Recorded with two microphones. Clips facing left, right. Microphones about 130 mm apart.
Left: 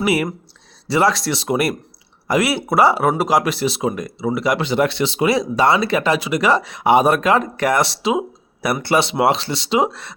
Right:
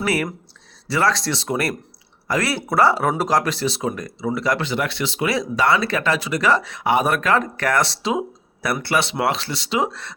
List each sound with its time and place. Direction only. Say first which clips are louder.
0.0 s speech: left 4 dB; 15° left (ahead or behind)